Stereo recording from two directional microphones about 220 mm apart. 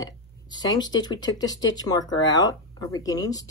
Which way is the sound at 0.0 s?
20° left (ahead or behind).